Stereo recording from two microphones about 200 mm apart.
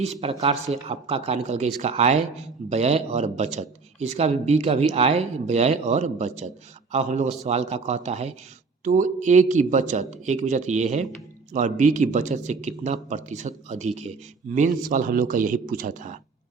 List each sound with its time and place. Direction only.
0.0 s a man's voice: 30° right (ahead or behind)